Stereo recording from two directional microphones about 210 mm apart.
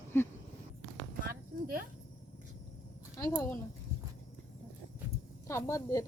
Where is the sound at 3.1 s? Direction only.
15° left (ahead or behind).